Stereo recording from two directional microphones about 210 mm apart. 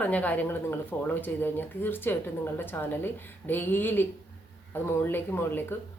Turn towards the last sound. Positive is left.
turn(degrees=10)  # may be behind; listen again after turning